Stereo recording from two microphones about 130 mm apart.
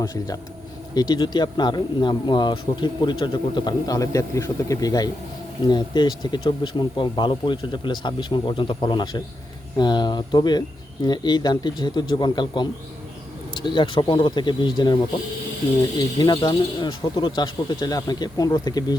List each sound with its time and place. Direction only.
0.0 s speech: 30° left (ahead or behind)
16.0 s speech: 35° left (ahead or behind)